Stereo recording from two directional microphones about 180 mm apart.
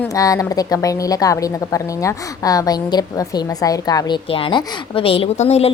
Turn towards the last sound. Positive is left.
turn(degrees=35)  # may be behind; listen again after turning